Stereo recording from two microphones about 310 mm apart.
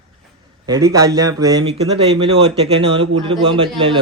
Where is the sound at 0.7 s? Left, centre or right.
Centre.